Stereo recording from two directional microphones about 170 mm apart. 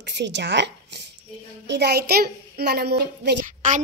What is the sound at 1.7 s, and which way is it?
A child's voice, 75° right (ahead or behind).